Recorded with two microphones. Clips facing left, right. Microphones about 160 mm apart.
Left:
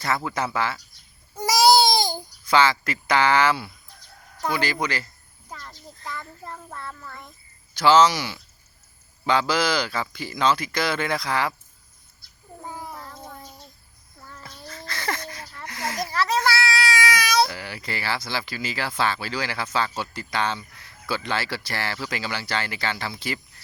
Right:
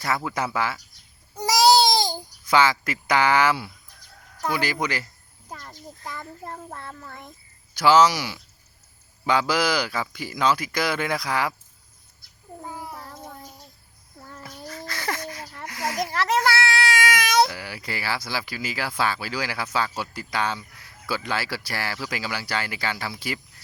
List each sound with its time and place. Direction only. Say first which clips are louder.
0.3 s speech: even; 10° right (ahead or behind)
1.5 s baby cry: even; 10° left (ahead or behind)
2.0 s babbling: even; 15° left (ahead or behind)
2.5 s a child's voice: even; 15° right (ahead or behind)
12.6 s child singing: left 1 dB; 10° right (ahead or behind)
14.3 s a sound: right 3 dB; 15° right (ahead or behind)
16.1 s a sound: even; 50° right (ahead or behind)
17.5 s speech: left 1 dB; 10° right (ahead or behind)